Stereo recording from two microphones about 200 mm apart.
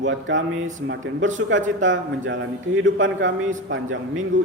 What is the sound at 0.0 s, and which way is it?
A man's voice, 70° right (ahead or behind).